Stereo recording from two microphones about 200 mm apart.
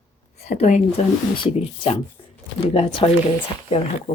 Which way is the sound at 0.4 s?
35° left (ahead or behind).